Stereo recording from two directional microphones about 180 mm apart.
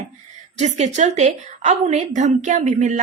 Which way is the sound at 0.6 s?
40° right (ahead or behind).